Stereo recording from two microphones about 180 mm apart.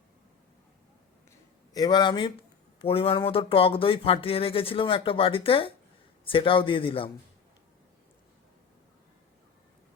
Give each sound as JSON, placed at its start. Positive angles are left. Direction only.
{"t": 1.7, "sound": "speech", "side_deg": 25}